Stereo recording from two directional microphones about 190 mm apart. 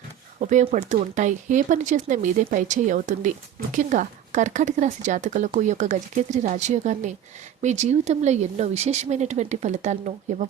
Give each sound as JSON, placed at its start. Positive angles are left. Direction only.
{"t": 0.3, "sound": "speech", "side_deg": -40}